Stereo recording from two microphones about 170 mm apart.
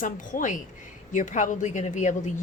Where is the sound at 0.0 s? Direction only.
50° left (ahead or behind).